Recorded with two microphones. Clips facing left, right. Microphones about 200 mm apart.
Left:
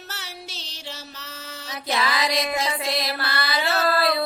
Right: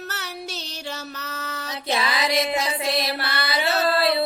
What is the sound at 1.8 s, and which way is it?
Music, 25° right (ahead or behind).